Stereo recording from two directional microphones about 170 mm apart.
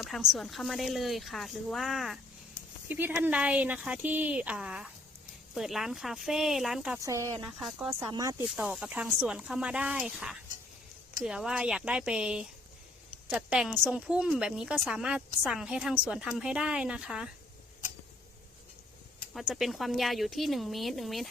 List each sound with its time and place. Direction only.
0.0 s speech: centre (ahead or behind)
7.0 s speech: 20° right (ahead or behind)
8.5 s speech: 5° right (ahead or behind)
19.3 s speech: centre (ahead or behind)